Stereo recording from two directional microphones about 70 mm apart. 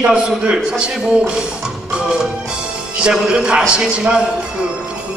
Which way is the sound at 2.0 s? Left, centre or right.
Centre.